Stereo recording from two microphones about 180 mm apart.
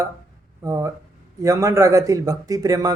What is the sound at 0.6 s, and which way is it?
A man's voice, 15° right (ahead or behind).